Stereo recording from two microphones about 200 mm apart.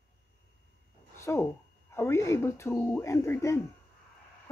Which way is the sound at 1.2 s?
15° left (ahead or behind).